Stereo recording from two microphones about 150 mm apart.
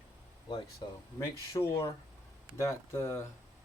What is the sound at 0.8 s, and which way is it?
Speech, 35° left (ahead or behind).